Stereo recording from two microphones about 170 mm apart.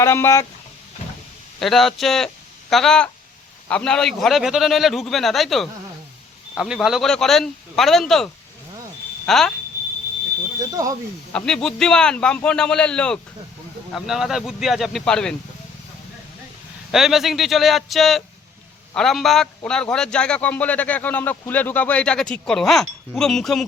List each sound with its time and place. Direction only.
0.0 s speech: 15° left (ahead or behind)
1.5 s a man's voice: centre (ahead or behind)
11.3 s a man's voice: 5° left (ahead or behind)
16.9 s a man's voice: centre (ahead or behind)